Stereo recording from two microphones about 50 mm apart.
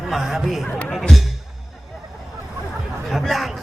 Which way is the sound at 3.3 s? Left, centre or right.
Centre.